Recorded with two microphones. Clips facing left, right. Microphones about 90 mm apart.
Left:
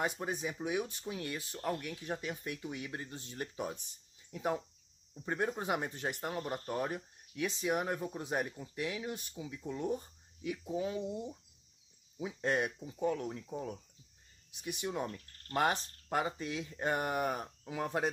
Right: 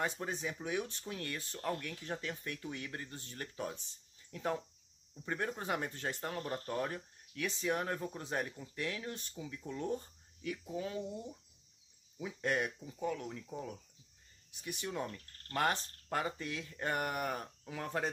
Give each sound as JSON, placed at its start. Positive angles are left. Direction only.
{"t": 0.0, "sound": "speech", "side_deg": 15}
{"t": 12.7, "sound": "speech", "side_deg": 10}
{"t": 13.0, "sound": "speech", "side_deg": 25}